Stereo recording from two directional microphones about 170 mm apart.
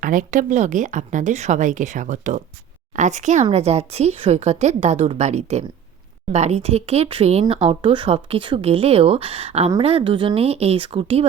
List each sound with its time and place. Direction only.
0.0 s speech: 50° right (ahead or behind); by 11.3 s 35° right (ahead or behind)